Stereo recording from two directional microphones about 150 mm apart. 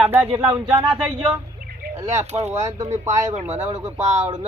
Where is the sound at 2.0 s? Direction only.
50° right (ahead or behind).